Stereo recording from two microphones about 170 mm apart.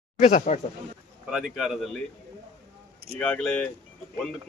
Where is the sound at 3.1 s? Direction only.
5° left (ahead or behind).